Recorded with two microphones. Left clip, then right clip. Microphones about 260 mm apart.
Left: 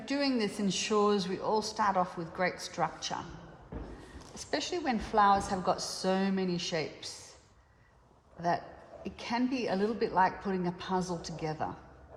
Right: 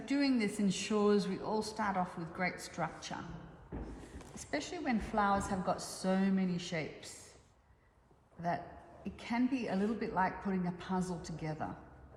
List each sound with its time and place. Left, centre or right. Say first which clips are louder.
0.0 s a woman's voice: left 2 dB; left
4.4 s a woman's voice: left 6 dB; left
8.4 s a woman's voice: left 6 dB; left